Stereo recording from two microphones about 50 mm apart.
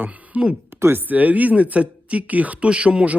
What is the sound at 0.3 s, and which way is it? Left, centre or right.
Speech, right.